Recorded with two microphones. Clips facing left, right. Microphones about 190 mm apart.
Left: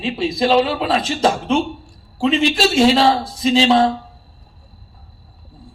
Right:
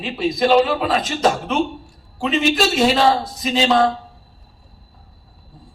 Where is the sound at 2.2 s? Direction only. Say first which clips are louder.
Left 2 dB; 30° left (ahead or behind).